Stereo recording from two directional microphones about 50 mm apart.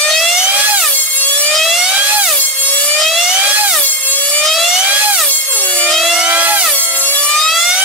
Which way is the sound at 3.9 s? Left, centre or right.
Left.